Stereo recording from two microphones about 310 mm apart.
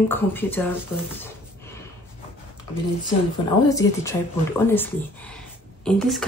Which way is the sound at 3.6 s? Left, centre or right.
Centre.